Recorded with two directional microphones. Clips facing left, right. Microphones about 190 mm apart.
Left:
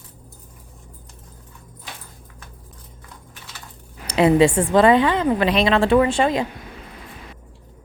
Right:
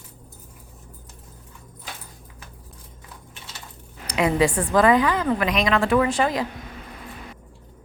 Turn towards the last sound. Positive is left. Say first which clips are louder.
# left 3 dB
turn(degrees=25)  # may be behind; listen again after turning